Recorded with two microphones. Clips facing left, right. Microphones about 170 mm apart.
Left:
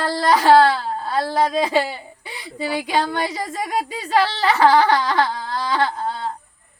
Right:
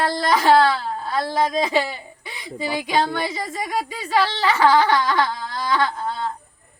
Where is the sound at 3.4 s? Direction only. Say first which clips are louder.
Left 2 dB; 40° left (ahead or behind).